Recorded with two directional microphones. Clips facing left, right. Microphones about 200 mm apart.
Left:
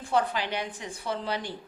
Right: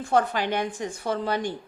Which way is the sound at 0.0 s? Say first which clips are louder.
Right 4 dB; 50° right (ahead or behind).